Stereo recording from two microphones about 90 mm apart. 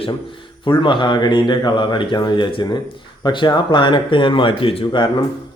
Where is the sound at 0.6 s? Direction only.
60° left (ahead or behind); by 5.0 s 85° left.